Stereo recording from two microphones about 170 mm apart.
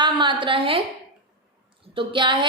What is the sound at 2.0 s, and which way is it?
Speech, 30° right (ahead or behind).